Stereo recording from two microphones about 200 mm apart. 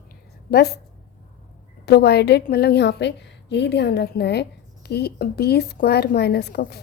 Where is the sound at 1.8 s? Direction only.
55° left (ahead or behind).